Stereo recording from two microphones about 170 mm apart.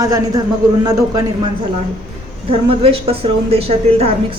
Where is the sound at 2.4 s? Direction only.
35° right (ahead or behind).